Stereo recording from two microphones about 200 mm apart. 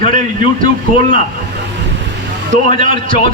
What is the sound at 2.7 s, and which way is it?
Speech, 25° left (ahead or behind).